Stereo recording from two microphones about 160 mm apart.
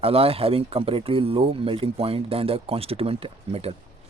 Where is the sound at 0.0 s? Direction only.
35° right (ahead or behind).